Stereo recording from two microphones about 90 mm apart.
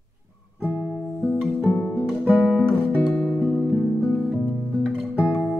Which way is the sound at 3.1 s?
10° left (ahead or behind).